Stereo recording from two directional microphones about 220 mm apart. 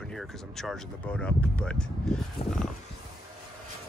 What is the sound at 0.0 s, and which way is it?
Speech, centre (ahead or behind).